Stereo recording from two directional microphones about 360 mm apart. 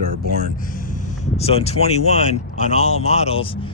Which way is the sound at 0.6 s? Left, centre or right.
Left.